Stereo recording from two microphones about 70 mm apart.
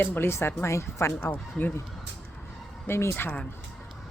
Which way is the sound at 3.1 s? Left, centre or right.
Left.